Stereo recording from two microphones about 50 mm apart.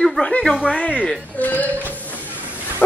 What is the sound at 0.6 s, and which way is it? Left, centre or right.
Speech, left.